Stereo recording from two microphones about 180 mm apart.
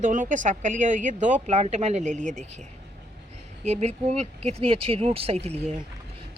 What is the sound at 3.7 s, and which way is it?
Speech, 40° right (ahead or behind).